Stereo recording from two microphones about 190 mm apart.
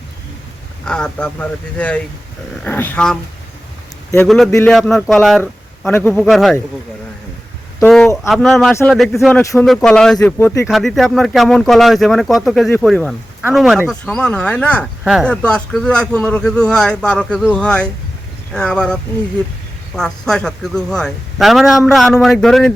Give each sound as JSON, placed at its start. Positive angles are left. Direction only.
{"t": 0.9, "sound": "speech", "side_deg": 5}
{"t": 4.7, "sound": "speech", "side_deg": 0}
{"t": 7.8, "sound": "a sound", "side_deg": 5}
{"t": 8.3, "sound": "speech", "side_deg": 0}
{"t": 9.4, "sound": "speech", "side_deg": 15}
{"t": 9.6, "sound": "speech", "side_deg": 5}
{"t": 10.7, "sound": "speech", "side_deg": 0}
{"t": 20.0, "sound": "speech", "side_deg": 5}